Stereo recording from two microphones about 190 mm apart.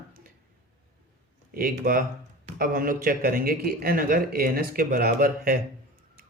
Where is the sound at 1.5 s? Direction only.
50° right (ahead or behind).